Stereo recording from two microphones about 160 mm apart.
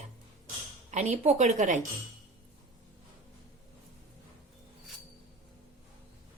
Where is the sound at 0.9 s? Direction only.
45° right (ahead or behind).